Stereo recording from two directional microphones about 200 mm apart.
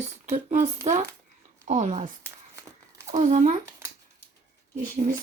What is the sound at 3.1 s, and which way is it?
Speech, 35° right (ahead or behind).